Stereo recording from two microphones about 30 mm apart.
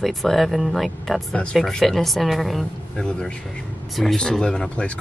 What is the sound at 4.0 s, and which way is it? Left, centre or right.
Speech, centre.